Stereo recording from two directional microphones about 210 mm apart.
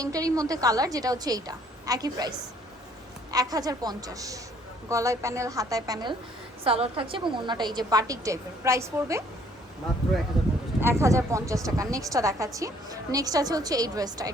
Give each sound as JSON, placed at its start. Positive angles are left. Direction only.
{"t": 0.0, "sound": "a woman's voice", "side_deg": -15}
{"t": 3.3, "sound": "a woman's voice", "side_deg": -15}
{"t": 10.4, "sound": "a sound", "side_deg": 0}
{"t": 10.8, "sound": "a woman's voice", "side_deg": -10}